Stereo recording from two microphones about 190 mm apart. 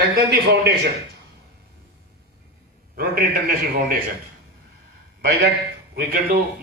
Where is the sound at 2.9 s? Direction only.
45° right (ahead or behind).